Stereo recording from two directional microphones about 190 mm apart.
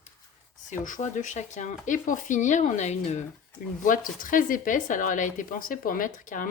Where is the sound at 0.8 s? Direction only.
40° left (ahead or behind).